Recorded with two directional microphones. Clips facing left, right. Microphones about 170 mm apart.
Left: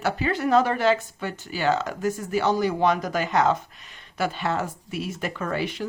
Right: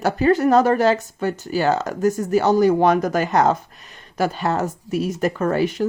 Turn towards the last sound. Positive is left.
turn(degrees=-45)  # may be behind; listen again after turning